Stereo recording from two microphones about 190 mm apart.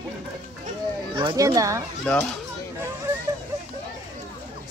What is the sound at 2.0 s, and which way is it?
Speech, centre (ahead or behind).